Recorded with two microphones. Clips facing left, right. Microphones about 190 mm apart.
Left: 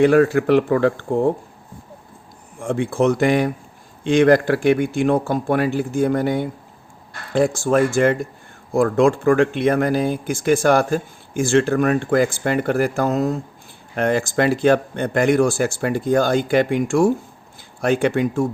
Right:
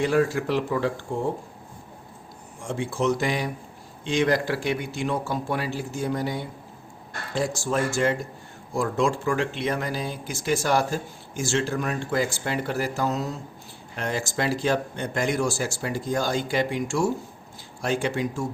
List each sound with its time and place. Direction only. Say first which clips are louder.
0.0 s speech: left 8 dB; 60° left (ahead or behind)
2.6 s speech: left 8 dB; 55° left (ahead or behind)